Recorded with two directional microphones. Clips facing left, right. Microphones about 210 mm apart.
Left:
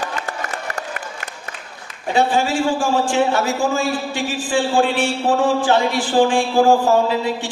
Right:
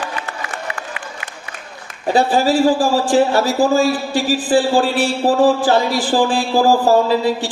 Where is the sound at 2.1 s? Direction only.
35° right (ahead or behind).